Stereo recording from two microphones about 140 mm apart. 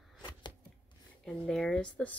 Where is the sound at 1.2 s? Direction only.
5° left (ahead or behind).